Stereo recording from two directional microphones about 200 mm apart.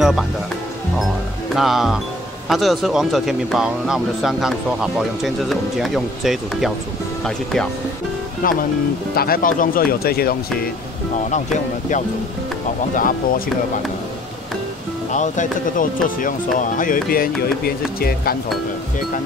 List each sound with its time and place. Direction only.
0.0 s speech: centre (ahead or behind)
1.5 s speech: centre (ahead or behind)
8.4 s speech: 45° left (ahead or behind)
11.2 s speech: 35° left (ahead or behind)
15.1 s speech: 40° left (ahead or behind)